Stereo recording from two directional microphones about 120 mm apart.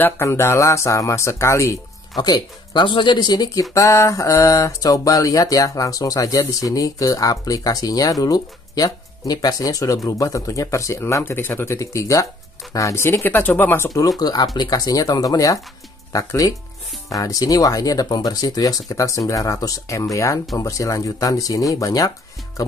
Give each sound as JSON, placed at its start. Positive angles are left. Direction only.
{"t": 0.0, "sound": "mantra", "side_deg": 20}
{"t": 14.2, "sound": "speech", "side_deg": 35}
{"t": 16.1, "sound": "mantra", "side_deg": 25}